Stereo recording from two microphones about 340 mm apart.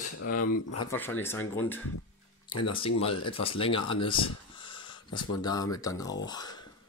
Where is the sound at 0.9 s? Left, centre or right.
Centre.